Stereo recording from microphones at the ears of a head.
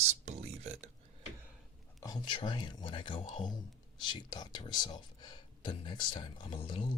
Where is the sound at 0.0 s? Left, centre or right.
Right.